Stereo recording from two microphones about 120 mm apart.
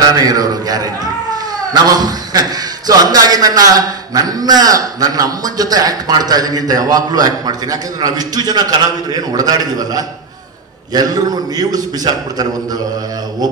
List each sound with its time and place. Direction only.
0.1 s a man's voice: 30° right (ahead or behind)